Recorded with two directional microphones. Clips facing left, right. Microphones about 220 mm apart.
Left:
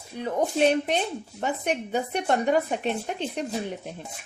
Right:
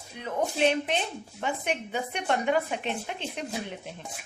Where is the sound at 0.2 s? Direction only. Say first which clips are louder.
Left 4 dB; 40° left (ahead or behind).